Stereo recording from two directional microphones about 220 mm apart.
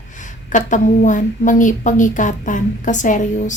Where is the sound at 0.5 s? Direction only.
35° left (ahead or behind).